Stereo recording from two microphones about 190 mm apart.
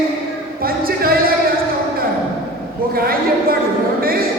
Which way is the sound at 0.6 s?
50° right (ahead or behind).